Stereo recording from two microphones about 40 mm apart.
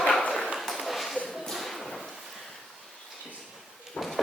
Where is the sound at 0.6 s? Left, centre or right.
Centre.